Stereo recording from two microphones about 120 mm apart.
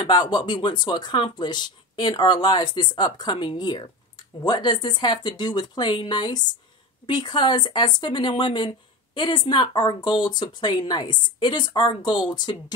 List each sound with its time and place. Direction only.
0.0 s speech: 35° left (ahead or behind)